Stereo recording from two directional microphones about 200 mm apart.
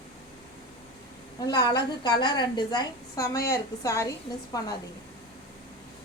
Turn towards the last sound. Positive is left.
turn(degrees=15)  # may be behind; listen again after turning